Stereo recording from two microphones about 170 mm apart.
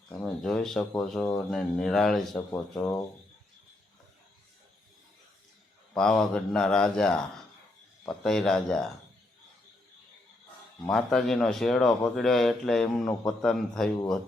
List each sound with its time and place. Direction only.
0.1 s speech: 5° left (ahead or behind)
2.5 s speech: 15° left (ahead or behind)
5.9 s speech: 5° left (ahead or behind)
10.8 s speech: 5° left (ahead or behind)